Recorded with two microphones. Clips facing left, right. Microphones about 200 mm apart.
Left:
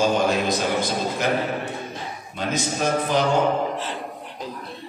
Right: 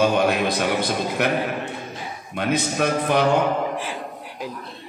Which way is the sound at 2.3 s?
65° right (ahead or behind).